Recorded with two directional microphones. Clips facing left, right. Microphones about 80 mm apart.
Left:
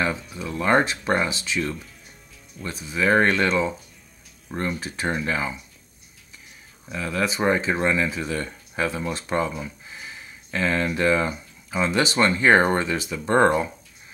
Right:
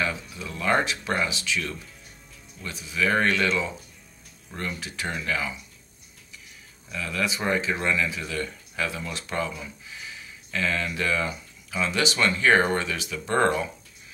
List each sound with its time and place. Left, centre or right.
0.6 s speech: left
6.9 s speech: left